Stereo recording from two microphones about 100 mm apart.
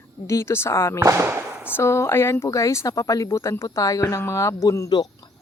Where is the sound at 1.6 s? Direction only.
25° left (ahead or behind).